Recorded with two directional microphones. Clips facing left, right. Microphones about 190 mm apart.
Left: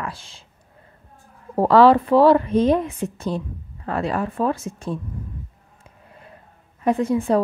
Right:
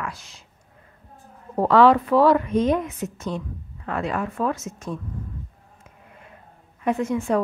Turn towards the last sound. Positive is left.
turn(degrees=35)  # may be behind; listen again after turning